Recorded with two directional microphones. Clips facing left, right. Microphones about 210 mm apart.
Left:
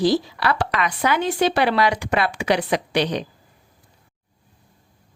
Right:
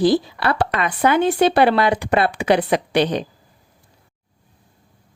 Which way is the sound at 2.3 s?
55° right (ahead or behind).